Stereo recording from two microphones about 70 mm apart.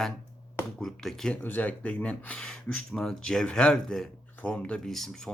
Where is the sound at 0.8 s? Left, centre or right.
Centre.